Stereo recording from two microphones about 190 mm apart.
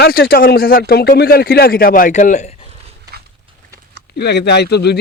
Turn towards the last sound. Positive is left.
turn(degrees=60)  # may be behind; listen again after turning